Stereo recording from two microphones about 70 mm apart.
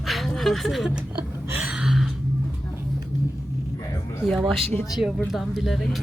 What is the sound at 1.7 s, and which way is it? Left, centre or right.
Gasp, centre.